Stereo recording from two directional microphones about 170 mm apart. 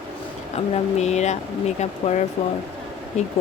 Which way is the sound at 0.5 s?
40° left (ahead or behind).